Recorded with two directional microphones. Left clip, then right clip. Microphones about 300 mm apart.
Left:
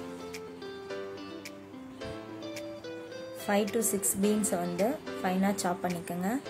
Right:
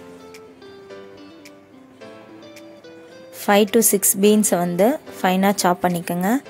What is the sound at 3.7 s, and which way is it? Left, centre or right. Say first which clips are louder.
A woman's voice: right 13 dB; right.